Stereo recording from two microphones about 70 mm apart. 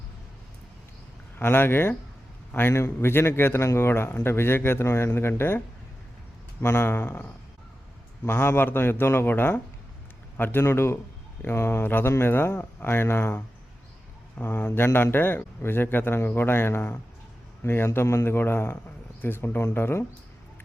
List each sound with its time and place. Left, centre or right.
1.4 s speech: left